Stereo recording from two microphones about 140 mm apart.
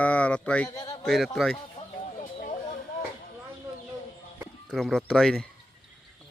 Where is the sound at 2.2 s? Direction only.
65° left (ahead or behind).